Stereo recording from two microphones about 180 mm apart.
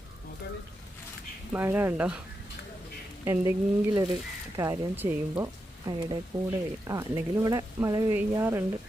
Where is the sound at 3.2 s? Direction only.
15° right (ahead or behind).